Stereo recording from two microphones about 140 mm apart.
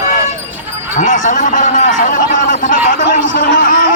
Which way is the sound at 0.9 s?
60° left (ahead or behind).